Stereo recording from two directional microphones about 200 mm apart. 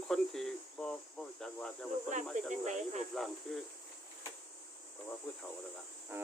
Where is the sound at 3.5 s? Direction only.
Centre (ahead or behind).